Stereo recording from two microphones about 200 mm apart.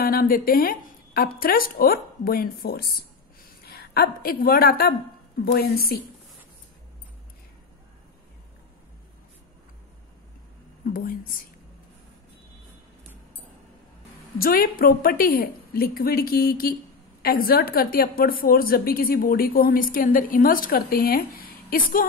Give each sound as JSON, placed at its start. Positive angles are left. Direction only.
{"t": 0.0, "sound": "a woman's voice", "side_deg": 45}
{"t": 10.9, "sound": "a woman's voice", "side_deg": 45}
{"t": 14.4, "sound": "a woman's voice", "side_deg": 45}